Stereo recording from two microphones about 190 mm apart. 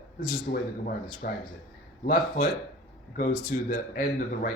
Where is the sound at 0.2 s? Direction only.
50° left (ahead or behind).